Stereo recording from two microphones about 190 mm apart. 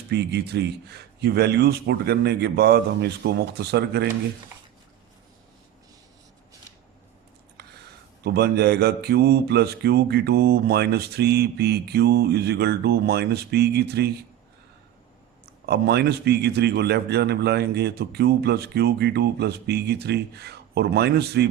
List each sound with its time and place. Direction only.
0.1 s speech: 60° right (ahead or behind)
8.2 s speech: 60° right (ahead or behind)
15.6 s speech: 60° right (ahead or behind)